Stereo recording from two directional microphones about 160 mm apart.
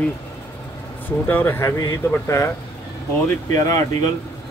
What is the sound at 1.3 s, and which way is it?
Speech, 15° left (ahead or behind).